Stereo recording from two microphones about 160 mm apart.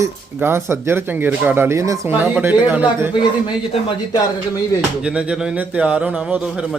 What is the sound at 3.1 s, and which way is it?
A man's voice, 30° left (ahead or behind).